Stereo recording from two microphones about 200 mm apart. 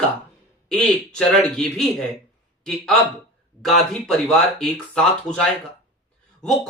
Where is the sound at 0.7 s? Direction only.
5° left (ahead or behind).